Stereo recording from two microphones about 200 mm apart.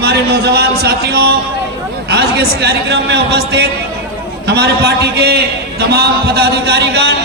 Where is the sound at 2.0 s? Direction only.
55° right (ahead or behind).